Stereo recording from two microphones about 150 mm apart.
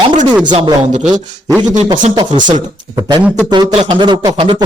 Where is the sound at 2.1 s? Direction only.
30° right (ahead or behind).